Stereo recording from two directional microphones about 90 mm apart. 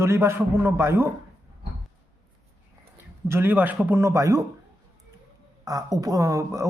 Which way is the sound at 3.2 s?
25° right (ahead or behind).